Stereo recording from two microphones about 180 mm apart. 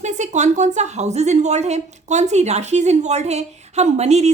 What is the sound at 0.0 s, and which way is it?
A woman's voice, 40° right (ahead or behind).